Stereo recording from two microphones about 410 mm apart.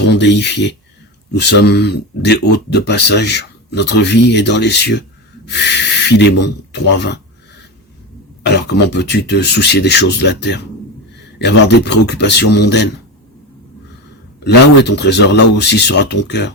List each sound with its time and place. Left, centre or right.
0.1 s speech: left
8.4 s speech: left
11.7 s speech: left
14.4 s speech: left